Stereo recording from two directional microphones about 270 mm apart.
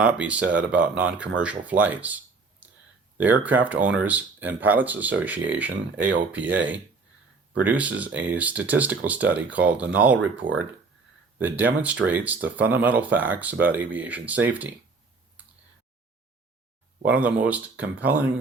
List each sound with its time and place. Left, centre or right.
0.0 s speech: centre
10.4 s speech: centre
11.3 s speech: centre
17.1 s speech: centre